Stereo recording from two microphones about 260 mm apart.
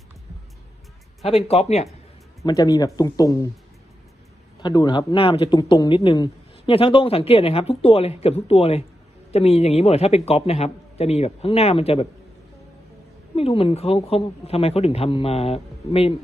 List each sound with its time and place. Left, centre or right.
1.5 s speech: left
2.4 s speech: centre
4.6 s speech: centre
13.3 s speech: left